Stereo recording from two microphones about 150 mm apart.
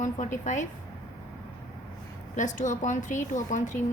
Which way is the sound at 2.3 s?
55° left (ahead or behind).